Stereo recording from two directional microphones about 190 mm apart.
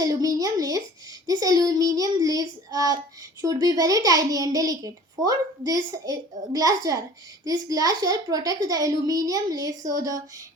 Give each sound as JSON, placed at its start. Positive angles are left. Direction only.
{"t": 0.0, "sound": "a child's voice", "side_deg": -20}